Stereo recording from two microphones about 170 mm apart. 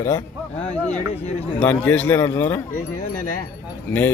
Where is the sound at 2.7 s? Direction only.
50° left (ahead or behind).